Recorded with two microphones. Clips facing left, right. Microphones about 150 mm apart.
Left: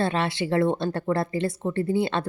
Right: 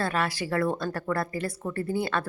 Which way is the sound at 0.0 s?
25° left (ahead or behind).